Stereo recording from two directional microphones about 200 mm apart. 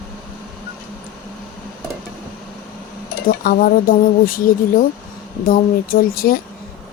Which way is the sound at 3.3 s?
45° left (ahead or behind).